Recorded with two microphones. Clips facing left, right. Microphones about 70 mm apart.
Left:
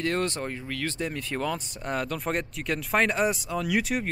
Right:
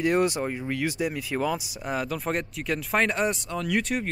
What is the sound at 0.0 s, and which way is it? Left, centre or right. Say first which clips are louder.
Speech: right 4 dB; centre.